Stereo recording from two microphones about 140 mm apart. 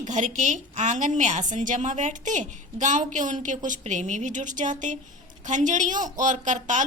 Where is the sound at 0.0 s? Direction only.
60° right (ahead or behind).